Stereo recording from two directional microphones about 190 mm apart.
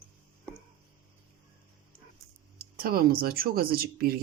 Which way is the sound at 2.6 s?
50° right (ahead or behind).